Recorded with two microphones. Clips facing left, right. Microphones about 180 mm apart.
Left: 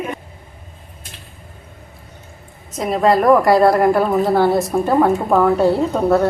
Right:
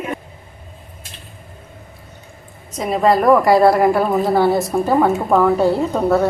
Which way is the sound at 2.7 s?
Centre (ahead or behind).